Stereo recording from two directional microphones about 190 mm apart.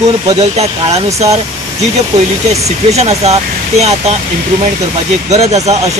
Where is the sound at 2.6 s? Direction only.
35° right (ahead or behind).